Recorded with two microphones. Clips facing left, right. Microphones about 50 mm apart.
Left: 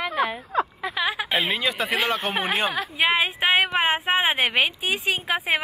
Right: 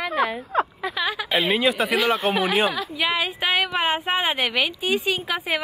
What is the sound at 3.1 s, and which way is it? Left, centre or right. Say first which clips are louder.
Speech: left 3 dB; left.